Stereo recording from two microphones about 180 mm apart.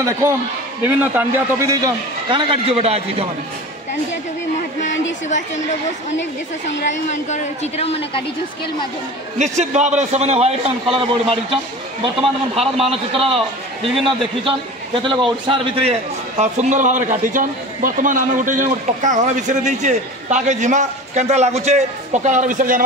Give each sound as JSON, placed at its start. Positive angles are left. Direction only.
{"t": 0.8, "sound": "a man's voice", "side_deg": -10}
{"t": 6.9, "sound": "a man's voice", "side_deg": 40}
{"t": 9.4, "sound": "a man's voice", "side_deg": -40}